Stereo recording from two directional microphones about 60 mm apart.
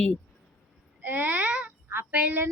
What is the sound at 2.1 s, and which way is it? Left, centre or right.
Speech, right.